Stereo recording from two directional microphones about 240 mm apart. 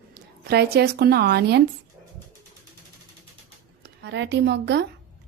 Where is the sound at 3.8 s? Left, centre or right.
Right.